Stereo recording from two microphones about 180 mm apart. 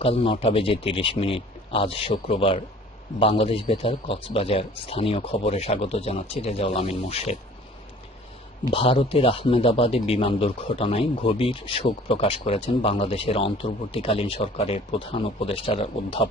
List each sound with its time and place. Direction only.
0.0 s speech: 35° left (ahead or behind)
8.7 s speech: 30° left (ahead or behind)